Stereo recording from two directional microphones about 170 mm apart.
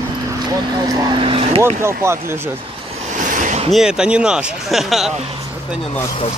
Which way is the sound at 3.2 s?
50° right (ahead or behind).